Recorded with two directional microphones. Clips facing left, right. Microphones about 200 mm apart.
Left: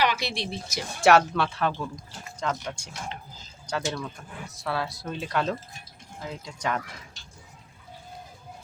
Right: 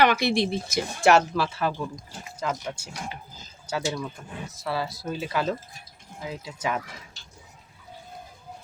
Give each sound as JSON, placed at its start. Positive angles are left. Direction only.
{"t": 0.0, "sound": "speech", "side_deg": -55}
{"t": 1.0, "sound": "speech", "side_deg": 0}